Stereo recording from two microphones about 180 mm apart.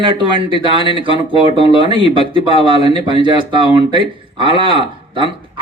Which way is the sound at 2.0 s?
30° left (ahead or behind).